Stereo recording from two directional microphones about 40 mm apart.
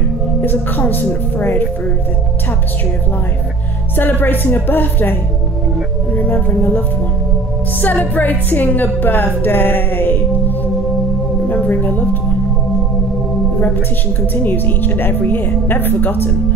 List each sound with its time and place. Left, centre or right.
0.4 s a woman's voice: left
3.9 s speech: left
6.1 s a woman's voice: left
7.8 s a woman's voice: left
11.4 s speech: left
14.3 s speech: left